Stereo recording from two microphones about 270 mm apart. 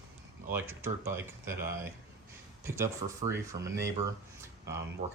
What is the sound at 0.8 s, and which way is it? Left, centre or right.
Speech, centre.